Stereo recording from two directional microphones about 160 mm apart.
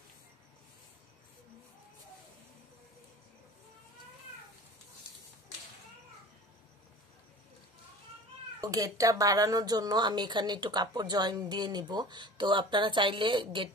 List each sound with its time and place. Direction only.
8.5 s speech: 20° right (ahead or behind)